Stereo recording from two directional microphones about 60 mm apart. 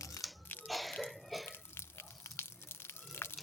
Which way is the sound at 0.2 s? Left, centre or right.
Left.